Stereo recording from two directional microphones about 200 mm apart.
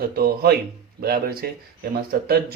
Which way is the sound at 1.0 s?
50° right (ahead or behind).